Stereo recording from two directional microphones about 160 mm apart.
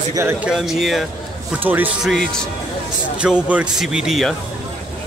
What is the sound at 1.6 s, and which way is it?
Speech, 10° right (ahead or behind).